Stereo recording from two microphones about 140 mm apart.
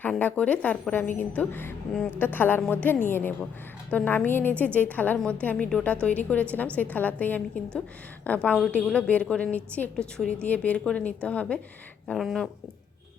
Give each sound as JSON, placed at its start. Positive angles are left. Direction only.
{"t": 0.0, "sound": "a woman's voice", "side_deg": 10}